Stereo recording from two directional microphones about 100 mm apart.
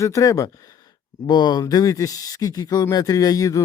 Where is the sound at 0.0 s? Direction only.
35° left (ahead or behind).